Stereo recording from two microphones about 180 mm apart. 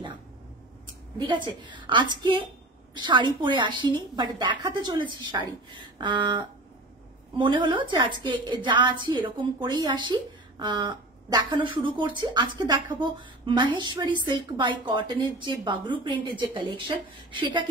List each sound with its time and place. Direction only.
1.1 s a woman's voice: 25° right (ahead or behind)